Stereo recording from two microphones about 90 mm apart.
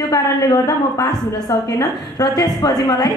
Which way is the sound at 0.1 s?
40° left (ahead or behind).